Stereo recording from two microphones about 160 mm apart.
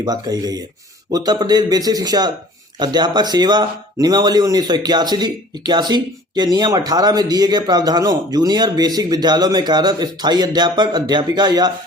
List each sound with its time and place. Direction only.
0.1 s speech: 25° right (ahead or behind)